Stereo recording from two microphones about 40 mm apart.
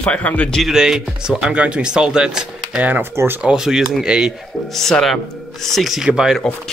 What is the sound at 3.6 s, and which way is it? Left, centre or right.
Speech, centre.